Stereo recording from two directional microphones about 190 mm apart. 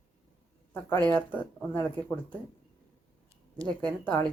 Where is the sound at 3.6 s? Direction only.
20° right (ahead or behind).